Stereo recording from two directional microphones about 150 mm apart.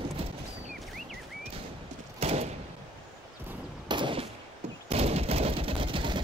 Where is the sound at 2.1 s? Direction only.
45° right (ahead or behind).